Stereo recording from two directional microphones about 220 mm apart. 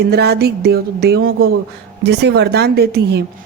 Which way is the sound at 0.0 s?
50° right (ahead or behind).